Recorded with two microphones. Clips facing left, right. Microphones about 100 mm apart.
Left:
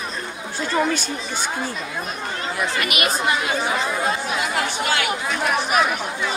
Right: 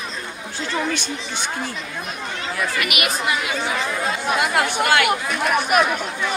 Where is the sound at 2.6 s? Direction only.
30° left (ahead or behind).